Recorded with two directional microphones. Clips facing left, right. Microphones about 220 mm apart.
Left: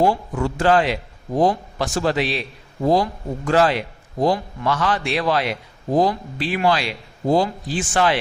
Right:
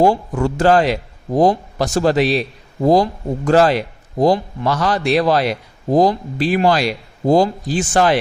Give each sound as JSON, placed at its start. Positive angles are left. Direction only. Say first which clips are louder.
{"t": 0.0, "sound": "a man's voice", "louder": "right 4 dB", "side_deg": -45}